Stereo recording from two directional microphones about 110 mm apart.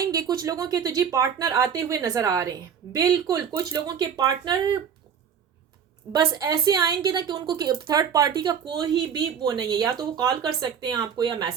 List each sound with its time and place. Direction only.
0.0 s a woman's voice: 35° right (ahead or behind)
6.1 s a woman's voice: 40° right (ahead or behind)